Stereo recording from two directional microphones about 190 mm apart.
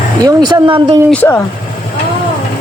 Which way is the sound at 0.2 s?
20° right (ahead or behind).